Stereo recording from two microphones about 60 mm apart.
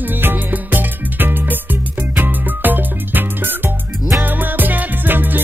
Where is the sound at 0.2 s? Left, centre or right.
Right.